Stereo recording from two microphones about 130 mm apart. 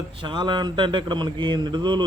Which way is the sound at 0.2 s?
35° right (ahead or behind).